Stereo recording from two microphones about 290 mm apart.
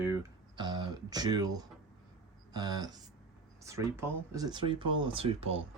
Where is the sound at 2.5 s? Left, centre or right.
Centre.